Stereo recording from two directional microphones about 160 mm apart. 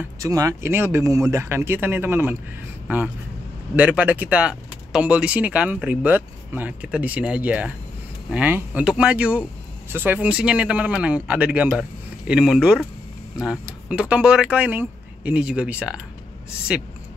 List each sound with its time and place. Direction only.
0.2 s speech: 20° right (ahead or behind)
3.7 s speech: 10° right (ahead or behind)